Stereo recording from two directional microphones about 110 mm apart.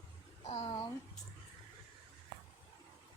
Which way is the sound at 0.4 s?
60° left (ahead or behind).